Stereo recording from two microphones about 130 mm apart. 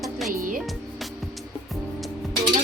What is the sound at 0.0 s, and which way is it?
Music, centre (ahead or behind).